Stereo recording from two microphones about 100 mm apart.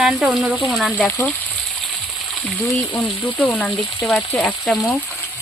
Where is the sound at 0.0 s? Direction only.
5° right (ahead or behind).